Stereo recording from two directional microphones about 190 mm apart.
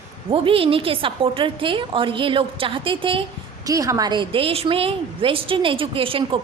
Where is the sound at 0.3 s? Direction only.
30° right (ahead or behind).